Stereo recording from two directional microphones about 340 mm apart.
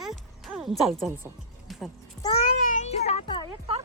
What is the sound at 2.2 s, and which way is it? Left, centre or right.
A child's voice, centre.